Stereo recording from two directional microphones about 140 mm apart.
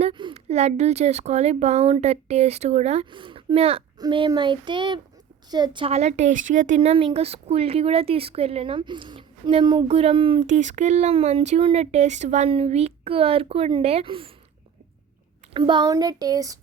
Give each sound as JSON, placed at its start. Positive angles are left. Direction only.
{"t": 0.0, "sound": "a sound", "side_deg": -35}
{"t": 0.3, "sound": "speech", "side_deg": -50}
{"t": 3.1, "sound": "speech", "side_deg": -35}
{"t": 3.9, "sound": "speech", "side_deg": -30}
{"t": 5.9, "sound": "speech", "side_deg": -50}
{"t": 10.4, "sound": "speech", "side_deg": -60}
{"t": 12.5, "sound": "speech", "side_deg": -45}
{"t": 15.5, "sound": "speech", "side_deg": -35}